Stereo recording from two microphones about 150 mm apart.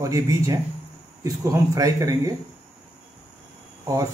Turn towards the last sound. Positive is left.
turn(degrees=-25)  # may be behind; listen again after turning